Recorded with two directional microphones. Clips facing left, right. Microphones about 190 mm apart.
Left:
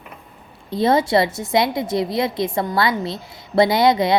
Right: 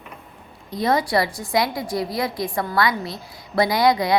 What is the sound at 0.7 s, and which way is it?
A woman's voice, 25° left (ahead or behind).